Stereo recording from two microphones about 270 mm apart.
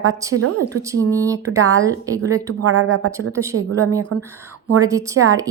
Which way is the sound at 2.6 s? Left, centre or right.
Right.